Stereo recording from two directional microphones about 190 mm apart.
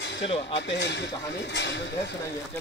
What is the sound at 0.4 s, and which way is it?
Speech, 70° left (ahead or behind).